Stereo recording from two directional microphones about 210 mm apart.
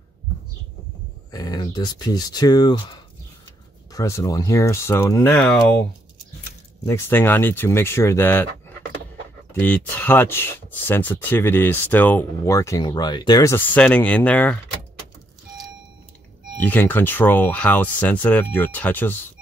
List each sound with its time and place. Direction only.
1.3 s speech: 20° left (ahead or behind)
6.9 s speech: 10° left (ahead or behind)
9.5 s speech: 10° left (ahead or behind)
16.5 s speech: 10° left (ahead or behind)